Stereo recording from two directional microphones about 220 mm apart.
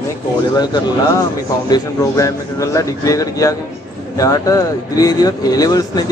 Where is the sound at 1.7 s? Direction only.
15° left (ahead or behind).